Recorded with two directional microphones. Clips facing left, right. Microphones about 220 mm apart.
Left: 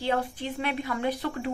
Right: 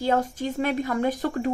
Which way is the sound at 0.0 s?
45° right (ahead or behind).